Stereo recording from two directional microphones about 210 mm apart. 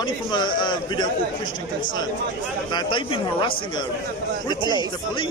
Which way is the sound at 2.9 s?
25° left (ahead or behind).